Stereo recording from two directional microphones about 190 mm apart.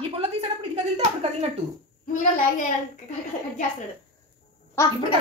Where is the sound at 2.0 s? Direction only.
40° left (ahead or behind).